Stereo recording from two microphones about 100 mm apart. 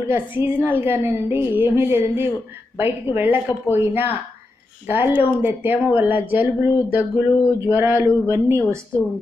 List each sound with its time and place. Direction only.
0.0 s speech: 25° right (ahead or behind)